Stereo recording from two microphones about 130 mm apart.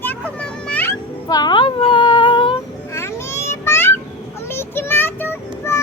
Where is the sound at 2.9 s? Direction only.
20° left (ahead or behind).